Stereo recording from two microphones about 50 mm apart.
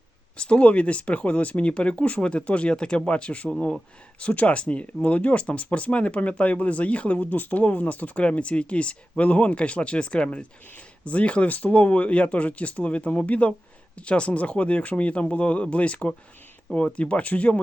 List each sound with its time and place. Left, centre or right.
0.3 s speech: left